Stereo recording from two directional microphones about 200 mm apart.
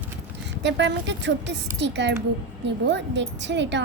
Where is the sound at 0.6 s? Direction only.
60° right (ahead or behind).